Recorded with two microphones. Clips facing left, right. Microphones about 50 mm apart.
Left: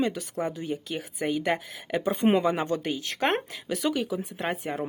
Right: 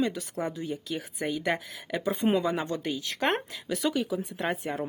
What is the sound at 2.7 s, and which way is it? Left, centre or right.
Speech, left.